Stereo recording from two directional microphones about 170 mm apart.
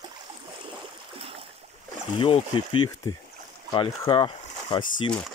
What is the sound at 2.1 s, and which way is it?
Speech, 30° left (ahead or behind).